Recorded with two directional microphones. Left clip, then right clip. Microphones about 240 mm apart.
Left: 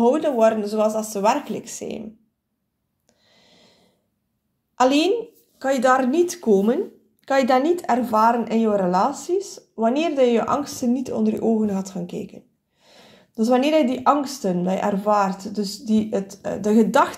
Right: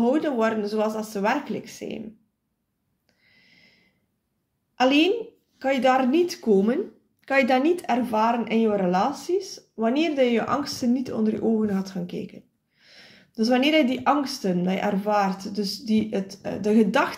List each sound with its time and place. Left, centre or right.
0.0 s speech: left
3.3 s a sound: left
4.7 s speech: left